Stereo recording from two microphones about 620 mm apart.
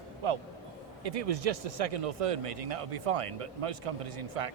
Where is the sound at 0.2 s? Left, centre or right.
Right.